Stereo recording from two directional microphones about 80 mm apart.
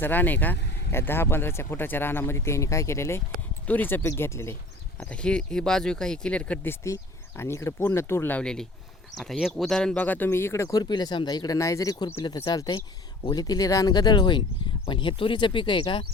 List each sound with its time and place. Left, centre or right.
0.0 s speech: left
3.7 s speech: left
5.0 s speech: centre
6.7 s speech: left
8.4 s speech: centre
10.0 s speech: left
10.8 s speech: left
12.7 s speech: left
13.9 s speech: left
14.8 s speech: left